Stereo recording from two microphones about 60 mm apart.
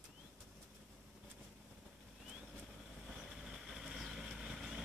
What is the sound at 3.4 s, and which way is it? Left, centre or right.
Vehicle, centre.